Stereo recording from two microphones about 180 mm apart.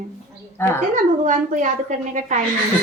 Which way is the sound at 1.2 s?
45° right (ahead or behind).